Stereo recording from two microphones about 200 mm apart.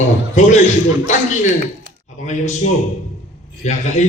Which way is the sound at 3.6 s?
35° left (ahead or behind).